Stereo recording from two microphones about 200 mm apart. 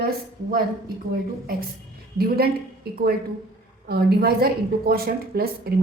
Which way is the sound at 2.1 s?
50° right (ahead or behind).